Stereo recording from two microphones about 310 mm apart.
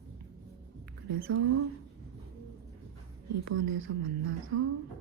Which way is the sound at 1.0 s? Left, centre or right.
Right.